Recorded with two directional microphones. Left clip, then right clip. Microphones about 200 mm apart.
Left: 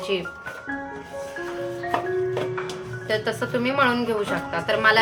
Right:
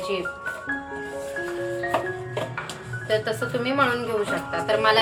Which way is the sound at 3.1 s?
35° left (ahead or behind).